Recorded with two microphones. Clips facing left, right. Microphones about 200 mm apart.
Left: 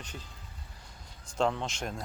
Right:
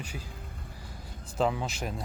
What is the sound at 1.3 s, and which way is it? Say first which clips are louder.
Speech: right 1 dB; 5° right (ahead or behind).